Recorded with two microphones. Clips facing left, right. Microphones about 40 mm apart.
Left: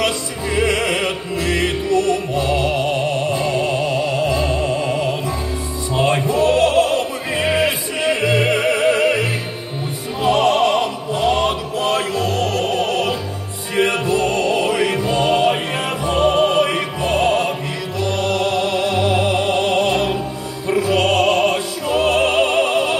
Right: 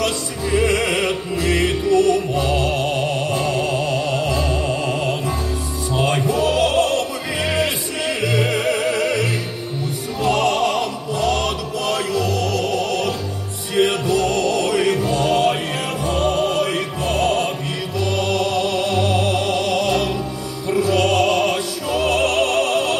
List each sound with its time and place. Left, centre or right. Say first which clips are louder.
0.5 s music: even; left
7.9 s opera: left 3 dB; left
13.7 s music: even; left
21.8 s opera: left 3 dB; left
22.1 s music: left 1 dB; left